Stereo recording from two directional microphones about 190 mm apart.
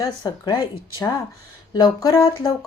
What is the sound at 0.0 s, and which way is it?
A woman's voice, 20° left (ahead or behind).